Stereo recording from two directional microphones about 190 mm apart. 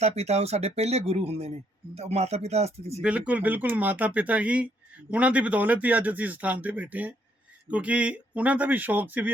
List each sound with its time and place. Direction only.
0.0 s speech: 35° right (ahead or behind)
3.0 s speech: 5° right (ahead or behind)